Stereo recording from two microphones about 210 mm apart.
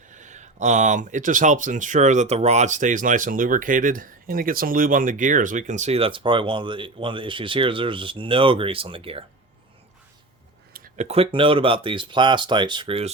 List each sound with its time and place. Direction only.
0.1 s speech: 35° right (ahead or behind)
10.8 s speech: 35° right (ahead or behind)